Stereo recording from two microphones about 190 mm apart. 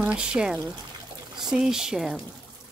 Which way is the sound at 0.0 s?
5° right (ahead or behind).